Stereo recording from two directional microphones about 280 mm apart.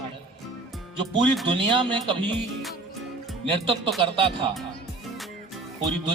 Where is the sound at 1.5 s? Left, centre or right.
Centre.